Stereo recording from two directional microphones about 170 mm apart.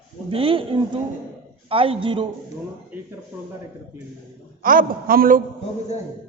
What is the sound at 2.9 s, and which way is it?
Speech, 10° right (ahead or behind).